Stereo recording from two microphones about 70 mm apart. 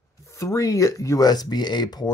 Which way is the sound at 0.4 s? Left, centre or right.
Left.